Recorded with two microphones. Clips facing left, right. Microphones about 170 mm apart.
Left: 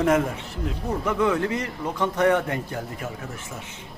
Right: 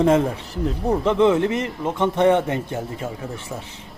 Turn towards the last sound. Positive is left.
turn(degrees=-25)  # may be behind; listen again after turning